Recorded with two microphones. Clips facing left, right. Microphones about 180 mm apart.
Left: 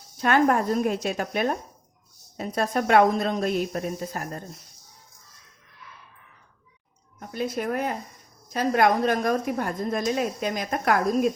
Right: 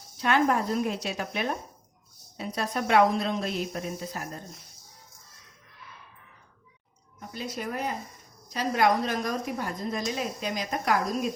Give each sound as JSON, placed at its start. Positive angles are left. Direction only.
{"t": 0.2, "sound": "a woman's voice", "side_deg": 50}
{"t": 7.2, "sound": "a woman's voice", "side_deg": 55}